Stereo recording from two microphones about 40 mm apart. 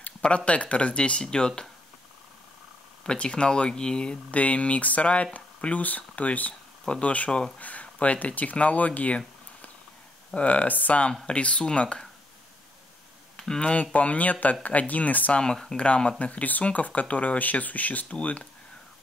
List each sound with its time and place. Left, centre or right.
0.5 s speech: left
3.1 s speech: left
4.4 s speech: left
7.6 s speech: left
11.2 s speech: left
13.6 s speech: left
15.3 s speech: centre
15.8 s speech: left
18.1 s speech: left